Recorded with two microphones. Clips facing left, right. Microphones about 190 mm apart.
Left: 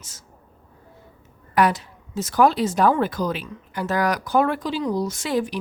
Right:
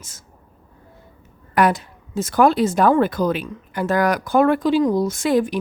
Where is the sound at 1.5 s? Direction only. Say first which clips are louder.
Right 2 dB; 50° right (ahead or behind).